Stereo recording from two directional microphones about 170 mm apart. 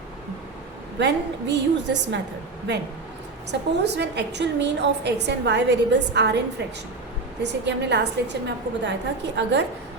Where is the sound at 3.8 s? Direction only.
85° right.